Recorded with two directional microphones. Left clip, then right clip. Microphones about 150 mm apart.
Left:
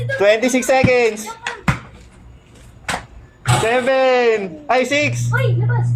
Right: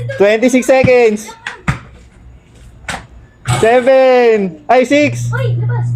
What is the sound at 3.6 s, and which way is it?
Speech, 35° right (ahead or behind).